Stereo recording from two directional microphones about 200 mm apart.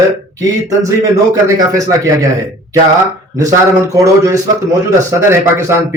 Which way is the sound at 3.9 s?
15° right (ahead or behind).